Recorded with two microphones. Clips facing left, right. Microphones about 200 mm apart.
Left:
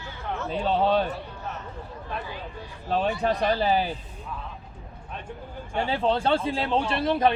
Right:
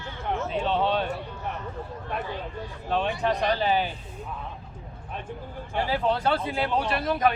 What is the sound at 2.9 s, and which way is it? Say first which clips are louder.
Speech: left 1 dB; 35° left (ahead or behind).